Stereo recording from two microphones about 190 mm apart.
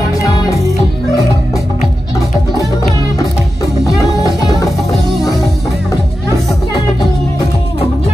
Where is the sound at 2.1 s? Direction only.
20° left (ahead or behind).